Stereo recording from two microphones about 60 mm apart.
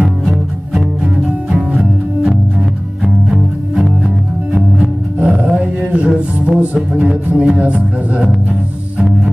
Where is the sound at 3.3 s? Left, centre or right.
Centre.